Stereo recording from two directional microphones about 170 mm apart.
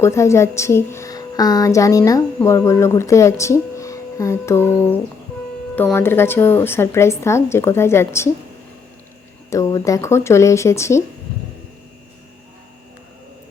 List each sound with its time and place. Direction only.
0.0 s a woman's voice: 15° left (ahead or behind)
5.7 s a woman's voice: 10° left (ahead or behind)
9.5 s a woman's voice: 20° left (ahead or behind)